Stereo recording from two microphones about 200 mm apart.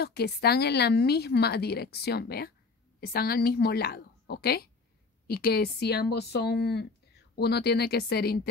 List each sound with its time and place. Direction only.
0.0 s a woman's voice: 55° left (ahead or behind)